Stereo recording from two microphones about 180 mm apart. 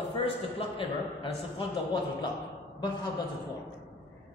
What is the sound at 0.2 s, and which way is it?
A man's voice, 30° left (ahead or behind).